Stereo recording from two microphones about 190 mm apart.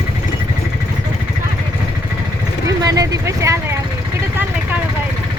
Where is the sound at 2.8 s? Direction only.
20° right (ahead or behind).